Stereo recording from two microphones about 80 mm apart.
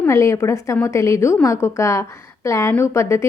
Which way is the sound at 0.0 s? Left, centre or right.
Left.